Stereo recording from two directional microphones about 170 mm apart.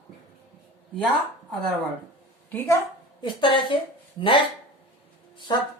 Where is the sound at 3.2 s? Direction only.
30° left (ahead or behind).